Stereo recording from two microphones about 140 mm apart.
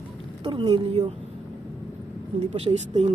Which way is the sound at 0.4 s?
40° right (ahead or behind).